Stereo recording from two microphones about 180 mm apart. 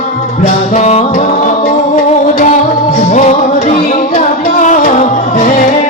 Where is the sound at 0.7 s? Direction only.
35° left (ahead or behind).